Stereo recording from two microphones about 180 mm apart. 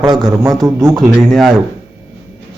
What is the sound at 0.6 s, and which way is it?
Speech, 15° right (ahead or behind).